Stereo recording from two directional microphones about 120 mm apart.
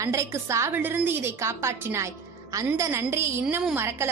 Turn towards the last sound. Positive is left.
turn(degrees=-20)  # may be behind; listen again after turning